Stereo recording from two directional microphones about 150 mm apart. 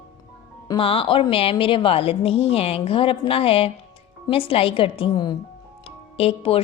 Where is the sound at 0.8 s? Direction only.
35° left (ahead or behind).